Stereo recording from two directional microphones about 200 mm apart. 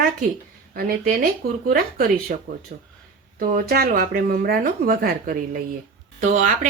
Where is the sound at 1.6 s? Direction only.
45° right (ahead or behind).